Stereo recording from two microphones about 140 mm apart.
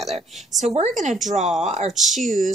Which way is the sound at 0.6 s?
55° right (ahead or behind).